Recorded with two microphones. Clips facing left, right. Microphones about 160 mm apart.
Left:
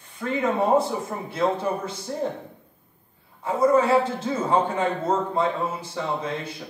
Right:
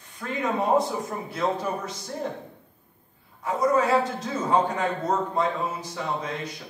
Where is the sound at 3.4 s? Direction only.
30° left (ahead or behind).